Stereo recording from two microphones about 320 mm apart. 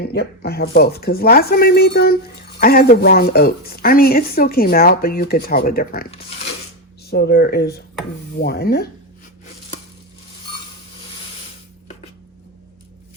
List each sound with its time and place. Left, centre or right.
0.0 s a woman's voice: left